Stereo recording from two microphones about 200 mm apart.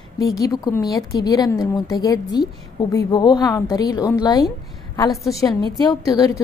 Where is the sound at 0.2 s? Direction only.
15° left (ahead or behind).